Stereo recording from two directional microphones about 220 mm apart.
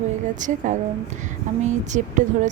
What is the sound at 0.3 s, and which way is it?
Speech, 35° right (ahead or behind).